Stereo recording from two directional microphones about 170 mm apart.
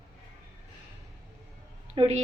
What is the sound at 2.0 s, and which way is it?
Speech, 40° right (ahead or behind).